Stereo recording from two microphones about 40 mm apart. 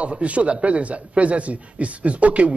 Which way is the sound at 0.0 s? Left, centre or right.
Right.